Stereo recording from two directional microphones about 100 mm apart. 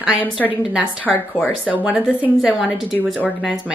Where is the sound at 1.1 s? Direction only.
5° left (ahead or behind).